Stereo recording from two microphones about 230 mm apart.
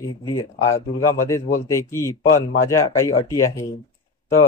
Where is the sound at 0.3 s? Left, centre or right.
Centre.